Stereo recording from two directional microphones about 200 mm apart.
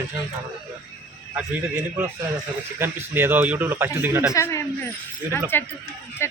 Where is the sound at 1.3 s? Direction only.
5° right (ahead or behind).